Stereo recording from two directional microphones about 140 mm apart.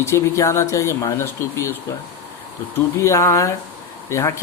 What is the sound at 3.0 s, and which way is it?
Speech, 20° left (ahead or behind).